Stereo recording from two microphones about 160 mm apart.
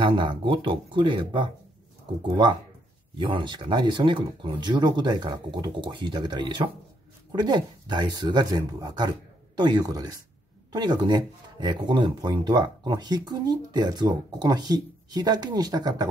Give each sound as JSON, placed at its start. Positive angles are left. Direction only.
{"t": 0.0, "sound": "speech", "side_deg": -30}
{"t": 3.2, "sound": "speech", "side_deg": -30}